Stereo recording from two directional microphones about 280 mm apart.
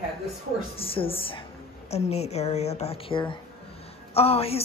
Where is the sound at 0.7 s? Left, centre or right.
Centre.